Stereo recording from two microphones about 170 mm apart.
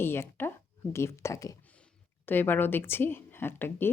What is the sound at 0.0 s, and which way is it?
Speech, 15° left (ahead or behind).